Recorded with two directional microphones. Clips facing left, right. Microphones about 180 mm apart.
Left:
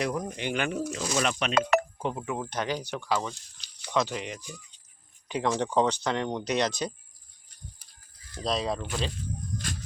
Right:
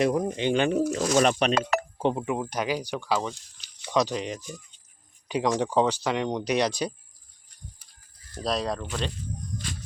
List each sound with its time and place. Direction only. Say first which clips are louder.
0.0 s speech: right 6 dB; 25° right (ahead or behind)
1.1 s speech: right 7 dB; 40° right (ahead or behind)
2.0 s speech: right 5 dB; 25° right (ahead or behind); by 6.9 s 10° right (ahead or behind)
8.4 s speech: right 1 dB; centre (ahead or behind)